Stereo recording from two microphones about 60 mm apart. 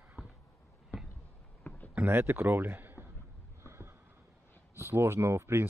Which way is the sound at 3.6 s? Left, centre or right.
Right.